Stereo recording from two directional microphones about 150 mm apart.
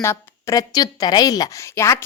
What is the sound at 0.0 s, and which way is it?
A woman's voice, 20° left (ahead or behind).